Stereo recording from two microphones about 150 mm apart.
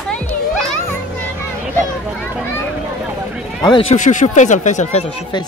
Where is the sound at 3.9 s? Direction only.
55° left (ahead or behind).